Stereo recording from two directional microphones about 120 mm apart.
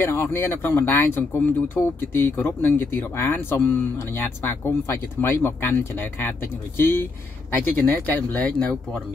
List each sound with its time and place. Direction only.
0.1 s speech: 20° left (ahead or behind)